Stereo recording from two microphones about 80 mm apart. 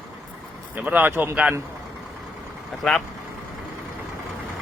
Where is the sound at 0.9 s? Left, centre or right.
Right.